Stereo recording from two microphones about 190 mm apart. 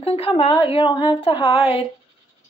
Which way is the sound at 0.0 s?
30° left (ahead or behind).